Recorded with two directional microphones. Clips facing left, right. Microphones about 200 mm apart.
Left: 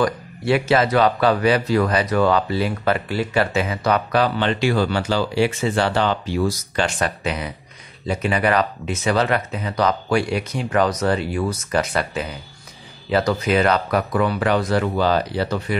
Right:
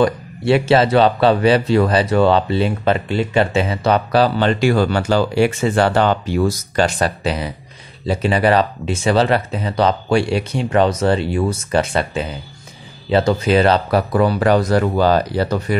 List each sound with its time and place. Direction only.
0.0 s speech: 30° right (ahead or behind)